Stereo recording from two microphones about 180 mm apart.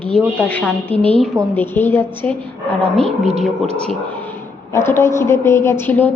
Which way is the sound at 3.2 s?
35° right (ahead or behind).